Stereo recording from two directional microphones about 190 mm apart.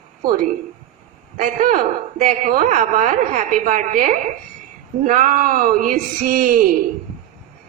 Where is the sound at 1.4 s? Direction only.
40° right (ahead or behind).